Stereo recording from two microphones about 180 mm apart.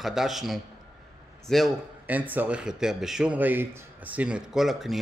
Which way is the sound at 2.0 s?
10° right (ahead or behind).